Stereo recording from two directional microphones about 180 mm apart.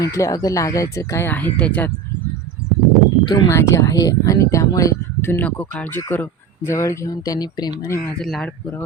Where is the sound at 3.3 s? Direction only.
20° left (ahead or behind).